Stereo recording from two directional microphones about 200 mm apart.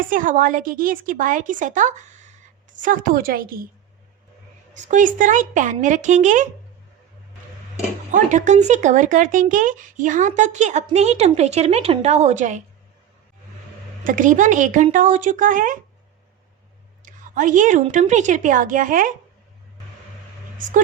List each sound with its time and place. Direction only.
0.0 s a woman's voice: 40° right (ahead or behind)
4.7 s speech: 40° right (ahead or behind)
8.1 s speech: 40° right (ahead or behind)
14.0 s speech: 40° right (ahead or behind)
17.1 s speech: 40° right (ahead or behind)